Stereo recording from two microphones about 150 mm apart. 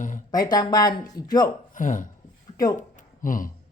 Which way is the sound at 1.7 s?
60° left (ahead or behind).